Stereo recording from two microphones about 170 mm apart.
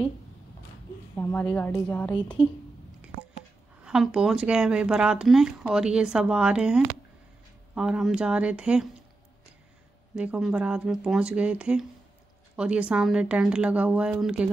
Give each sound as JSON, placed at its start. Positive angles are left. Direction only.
{"t": 1.1, "sound": "a woman's voice", "side_deg": 10}
{"t": 2.4, "sound": "a woman's voice", "side_deg": 30}
{"t": 3.8, "sound": "speech", "side_deg": -5}
{"t": 10.1, "sound": "speech", "side_deg": -5}